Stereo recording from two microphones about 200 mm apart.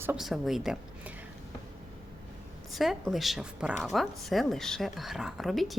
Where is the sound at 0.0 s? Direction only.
5° right (ahead or behind).